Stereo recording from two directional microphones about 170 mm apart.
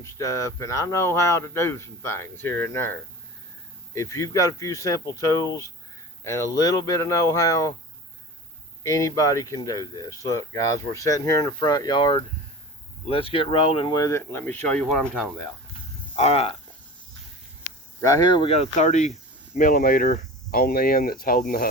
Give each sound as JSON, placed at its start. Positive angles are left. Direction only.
{"t": 0.0, "sound": "speech", "side_deg": 15}
{"t": 3.9, "sound": "speech", "side_deg": 15}
{"t": 8.8, "sound": "speech", "side_deg": 20}
{"t": 16.1, "sound": "speech", "side_deg": 40}
{"t": 18.0, "sound": "speech", "side_deg": 25}
{"t": 19.5, "sound": "speech", "side_deg": 55}